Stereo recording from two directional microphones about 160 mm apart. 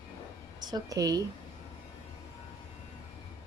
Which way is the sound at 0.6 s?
25° right (ahead or behind).